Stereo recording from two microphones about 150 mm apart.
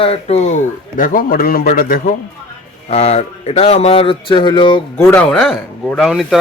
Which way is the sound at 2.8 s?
45° left (ahead or behind).